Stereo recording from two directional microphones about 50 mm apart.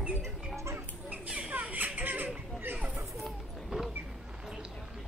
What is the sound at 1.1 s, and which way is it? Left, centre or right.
Mouse, right.